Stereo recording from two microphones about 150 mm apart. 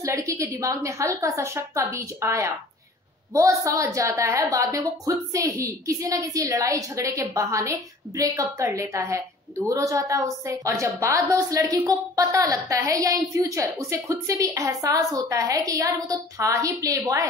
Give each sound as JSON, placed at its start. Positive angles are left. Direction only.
{"t": 0.0, "sound": "a woman's voice", "side_deg": -20}